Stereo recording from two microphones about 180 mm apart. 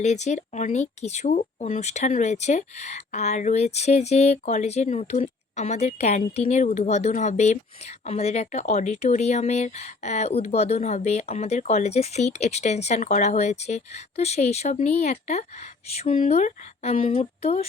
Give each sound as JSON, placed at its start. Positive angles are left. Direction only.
{"t": 0.0, "sound": "speech", "side_deg": 40}